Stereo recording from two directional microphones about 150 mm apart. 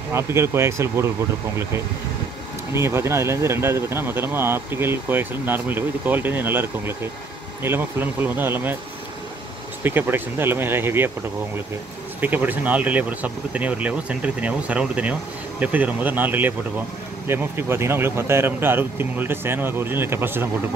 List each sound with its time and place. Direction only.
0.1 s speech: 15° right (ahead or behind)
2.7 s speech: 15° right (ahead or behind)
9.8 s speech: 15° right (ahead or behind)
12.2 s speech: 10° right (ahead or behind)